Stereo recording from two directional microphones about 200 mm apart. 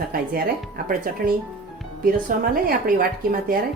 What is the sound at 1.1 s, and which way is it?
Speech, 45° right (ahead or behind).